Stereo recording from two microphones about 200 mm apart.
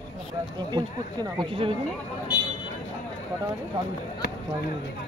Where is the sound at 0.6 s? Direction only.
20° right (ahead or behind).